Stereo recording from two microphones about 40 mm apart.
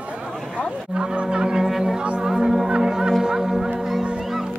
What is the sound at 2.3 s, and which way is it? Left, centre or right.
Music, centre.